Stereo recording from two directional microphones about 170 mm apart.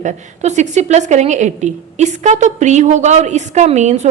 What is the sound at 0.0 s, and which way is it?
A woman's voice, 45° right (ahead or behind).